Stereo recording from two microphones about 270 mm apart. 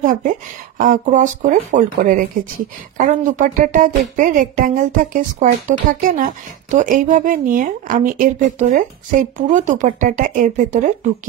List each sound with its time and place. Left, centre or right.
0.0 s speech: right